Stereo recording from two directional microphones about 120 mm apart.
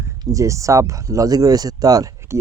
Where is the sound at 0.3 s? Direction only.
25° right (ahead or behind).